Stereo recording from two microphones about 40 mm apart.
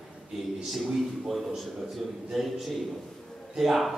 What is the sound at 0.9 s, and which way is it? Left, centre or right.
A man's voice, centre.